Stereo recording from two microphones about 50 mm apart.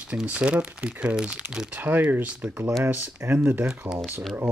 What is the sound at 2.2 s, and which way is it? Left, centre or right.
Speech, right.